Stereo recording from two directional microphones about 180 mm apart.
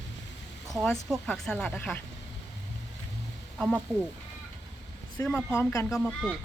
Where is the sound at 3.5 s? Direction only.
5° left (ahead or behind).